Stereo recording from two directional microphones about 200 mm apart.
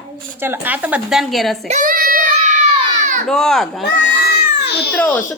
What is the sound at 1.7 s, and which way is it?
Child singing, 45° right (ahead or behind).